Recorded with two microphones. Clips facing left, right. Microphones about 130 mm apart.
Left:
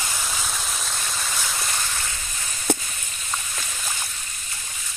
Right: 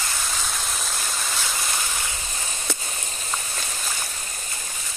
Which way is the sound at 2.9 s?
35° right (ahead or behind).